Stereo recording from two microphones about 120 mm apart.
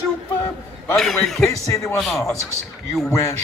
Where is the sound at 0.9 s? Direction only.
Centre (ahead or behind).